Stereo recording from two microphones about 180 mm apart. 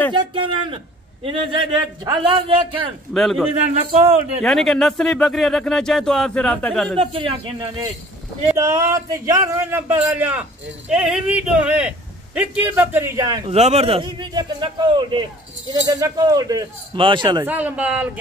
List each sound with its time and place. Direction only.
0.1 s speech: 25° right (ahead or behind)
3.1 s speech: centre (ahead or behind)
3.7 s speech: 35° right (ahead or behind)
4.4 s speech: centre (ahead or behind)
7.0 s speech: 30° right (ahead or behind)
8.5 s a man's voice: 15° right (ahead or behind)
13.5 s speech: 35° right (ahead or behind)
17.5 s a man's voice: 10° right (ahead or behind)